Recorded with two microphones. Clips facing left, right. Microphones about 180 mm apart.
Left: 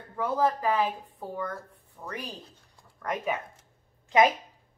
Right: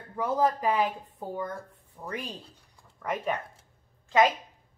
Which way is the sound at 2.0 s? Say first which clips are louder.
Right 2 dB; 10° right (ahead or behind).